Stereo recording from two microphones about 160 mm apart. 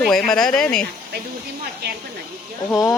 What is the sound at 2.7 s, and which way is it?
Speech, 20° left (ahead or behind).